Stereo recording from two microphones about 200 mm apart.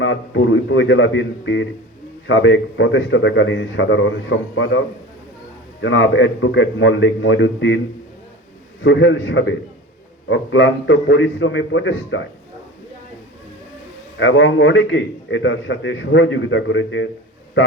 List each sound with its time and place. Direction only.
0.0 s a man's voice: 65° left (ahead or behind)
5.8 s a man's voice: 70° left (ahead or behind)
8.8 s a man's voice: 65° left (ahead or behind)
14.2 s a man's voice: 70° left (ahead or behind)